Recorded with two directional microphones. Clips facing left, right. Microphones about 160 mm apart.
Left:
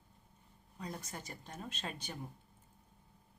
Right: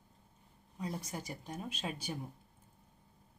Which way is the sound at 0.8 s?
10° right (ahead or behind).